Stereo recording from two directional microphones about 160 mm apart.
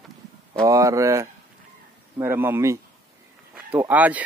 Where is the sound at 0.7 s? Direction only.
20° right (ahead or behind).